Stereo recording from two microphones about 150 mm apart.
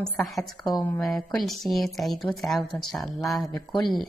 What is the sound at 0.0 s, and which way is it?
A woman's voice, centre (ahead or behind).